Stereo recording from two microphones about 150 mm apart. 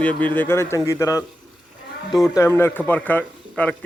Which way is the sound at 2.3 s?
15° left (ahead or behind).